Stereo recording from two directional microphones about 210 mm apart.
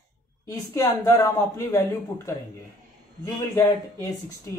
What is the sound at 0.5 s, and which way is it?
Speech, 15° left (ahead or behind).